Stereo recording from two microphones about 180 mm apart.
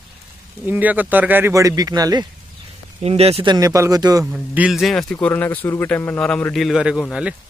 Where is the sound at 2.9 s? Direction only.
35° right (ahead or behind).